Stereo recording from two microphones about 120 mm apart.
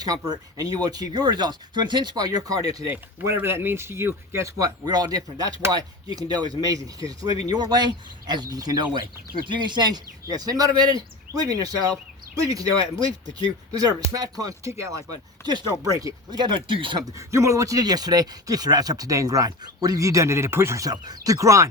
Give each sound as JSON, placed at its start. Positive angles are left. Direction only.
{"t": 0.0, "sound": "speech", "side_deg": -30}
{"t": 2.9, "sound": "speech", "side_deg": -20}
{"t": 15.4, "sound": "speech", "side_deg": -35}
{"t": 17.1, "sound": "speech", "side_deg": -25}